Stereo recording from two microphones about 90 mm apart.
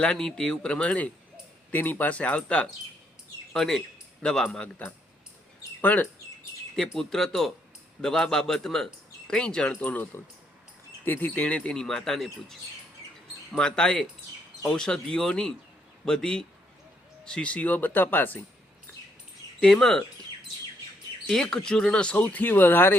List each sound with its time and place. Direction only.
0.0 s a man's voice: 5° left (ahead or behind)
5.8 s speech: 20° left (ahead or behind)
6.7 s speech: 5° left (ahead or behind)
13.6 s speech: 10° left (ahead or behind)
19.6 s speech: 5° left (ahead or behind)
21.2 s speech: 5° left (ahead or behind); by 23.0 s 20° left (ahead or behind)